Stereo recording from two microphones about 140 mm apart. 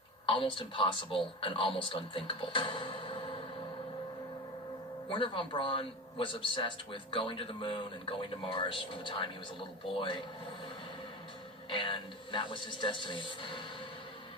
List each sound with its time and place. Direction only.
0.3 s a man's voice: 35° left (ahead or behind)
5.0 s a man's voice: 35° left (ahead or behind)
11.7 s a man's voice: 35° left (ahead or behind)